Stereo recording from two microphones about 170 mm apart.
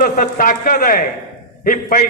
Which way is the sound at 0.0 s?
55° left (ahead or behind).